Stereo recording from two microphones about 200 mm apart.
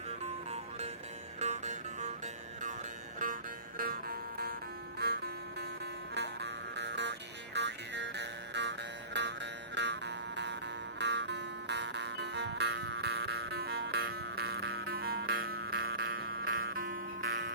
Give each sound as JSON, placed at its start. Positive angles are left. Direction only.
{"t": 0.1, "sound": "music", "side_deg": -35}
{"t": 3.8, "sound": "music", "side_deg": -50}